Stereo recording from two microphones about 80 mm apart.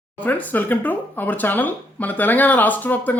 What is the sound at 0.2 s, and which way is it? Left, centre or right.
Speech, left.